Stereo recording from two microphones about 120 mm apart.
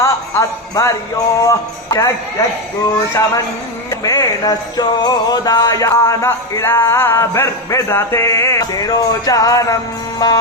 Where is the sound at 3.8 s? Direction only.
30° left (ahead or behind).